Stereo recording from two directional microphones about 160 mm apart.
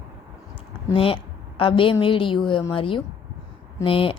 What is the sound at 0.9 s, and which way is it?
A woman's voice, 35° left (ahead or behind).